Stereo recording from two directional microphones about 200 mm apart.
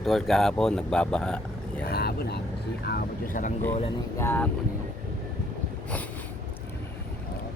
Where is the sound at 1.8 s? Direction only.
50° left (ahead or behind).